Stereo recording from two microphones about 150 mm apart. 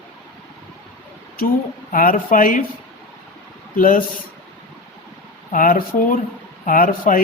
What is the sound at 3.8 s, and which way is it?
Speech, 65° left (ahead or behind).